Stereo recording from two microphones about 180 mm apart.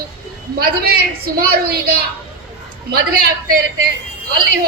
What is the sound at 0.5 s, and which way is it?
A woman's voice, 60° right (ahead or behind).